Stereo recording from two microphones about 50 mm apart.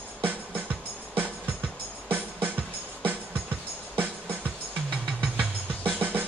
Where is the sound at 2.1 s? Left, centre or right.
Right.